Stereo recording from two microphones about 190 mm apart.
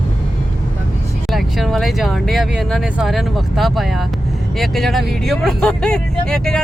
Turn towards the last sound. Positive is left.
turn(degrees=5)  # may be behind; listen again after turning